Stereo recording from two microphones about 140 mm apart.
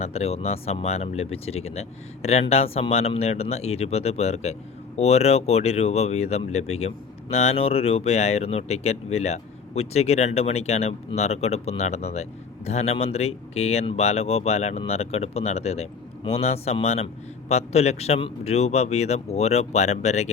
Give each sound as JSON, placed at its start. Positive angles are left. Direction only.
{"t": 0.0, "sound": "speech", "side_deg": 45}